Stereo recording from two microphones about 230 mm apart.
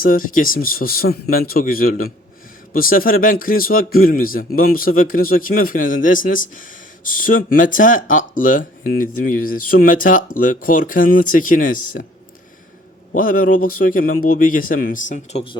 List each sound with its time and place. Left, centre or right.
0.0 s speech: left
13.1 s speech: left